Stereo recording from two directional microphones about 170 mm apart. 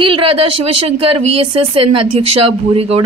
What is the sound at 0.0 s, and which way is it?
Speech, 30° right (ahead or behind).